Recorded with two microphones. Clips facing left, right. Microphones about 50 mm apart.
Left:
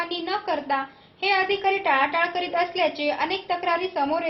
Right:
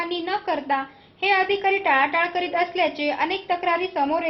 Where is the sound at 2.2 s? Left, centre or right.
Centre.